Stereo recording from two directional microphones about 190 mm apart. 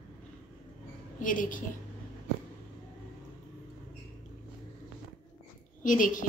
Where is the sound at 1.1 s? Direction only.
45° left (ahead or behind).